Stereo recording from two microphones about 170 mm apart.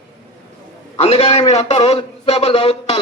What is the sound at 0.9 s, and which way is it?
A man's voice, 35° left (ahead or behind).